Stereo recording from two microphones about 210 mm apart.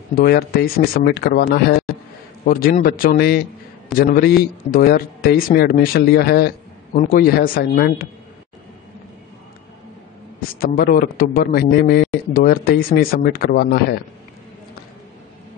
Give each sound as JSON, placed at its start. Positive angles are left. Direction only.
{"t": 0.1, "sound": "speech", "side_deg": 45}
{"t": 10.6, "sound": "speech", "side_deg": 45}